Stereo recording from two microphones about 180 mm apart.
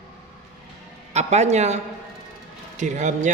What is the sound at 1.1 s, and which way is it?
Speech, 40° right (ahead or behind).